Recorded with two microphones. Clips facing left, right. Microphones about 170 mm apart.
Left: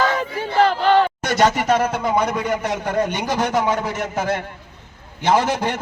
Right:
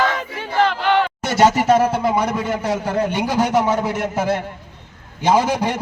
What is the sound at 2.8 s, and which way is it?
A man's voice, 10° right (ahead or behind).